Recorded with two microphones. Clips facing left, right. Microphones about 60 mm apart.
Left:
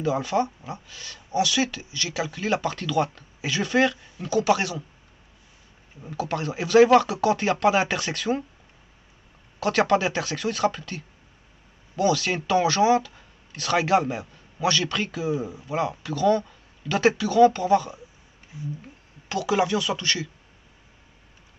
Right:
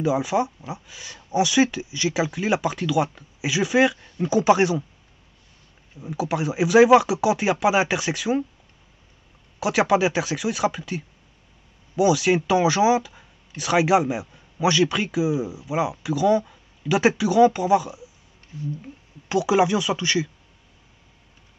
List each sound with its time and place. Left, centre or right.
0.0 s speech: centre
5.9 s speech: centre
9.6 s speech: centre
18.5 s speech: centre
19.2 s speech: centre